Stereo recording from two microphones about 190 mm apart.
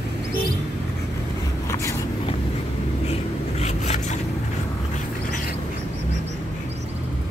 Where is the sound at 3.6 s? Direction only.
35° left (ahead or behind).